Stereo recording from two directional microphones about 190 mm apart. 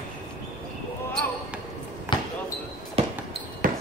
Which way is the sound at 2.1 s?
25° left (ahead or behind).